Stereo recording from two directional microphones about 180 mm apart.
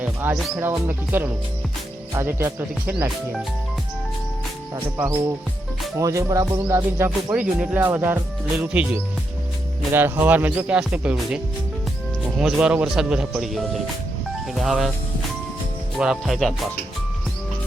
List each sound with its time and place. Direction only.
0.0 s music: 10° right (ahead or behind)
0.3 s speech: centre (ahead or behind)
0.6 s speech: 10° right (ahead or behind)
4.7 s speech: 15° right (ahead or behind)
12.4 s speech: 5° right (ahead or behind)
16.0 s speech: centre (ahead or behind)